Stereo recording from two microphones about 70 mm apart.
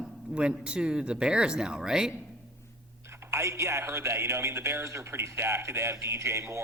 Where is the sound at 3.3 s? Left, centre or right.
Right.